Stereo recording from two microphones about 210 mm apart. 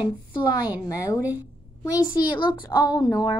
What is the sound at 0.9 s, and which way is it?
A woman's voice, 15° left (ahead or behind).